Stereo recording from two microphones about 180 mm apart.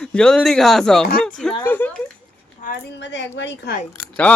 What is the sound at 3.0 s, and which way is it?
Speech, 80° left.